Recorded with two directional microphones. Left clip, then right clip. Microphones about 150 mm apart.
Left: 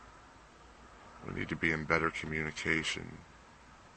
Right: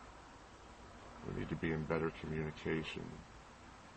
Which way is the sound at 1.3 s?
20° left (ahead or behind).